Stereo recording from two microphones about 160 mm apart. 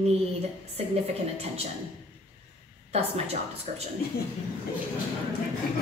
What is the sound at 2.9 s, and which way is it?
Speech, 40° right (ahead or behind).